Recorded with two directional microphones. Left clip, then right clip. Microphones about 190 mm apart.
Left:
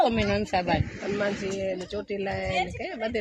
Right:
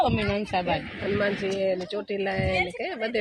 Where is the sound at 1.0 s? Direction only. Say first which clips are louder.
Right 2 dB; 50° right (ahead or behind).